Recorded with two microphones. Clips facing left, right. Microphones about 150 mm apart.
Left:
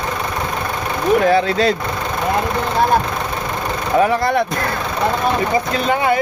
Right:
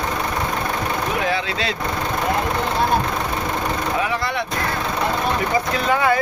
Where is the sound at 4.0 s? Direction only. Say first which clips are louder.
Left 8 dB; 45° left (ahead or behind).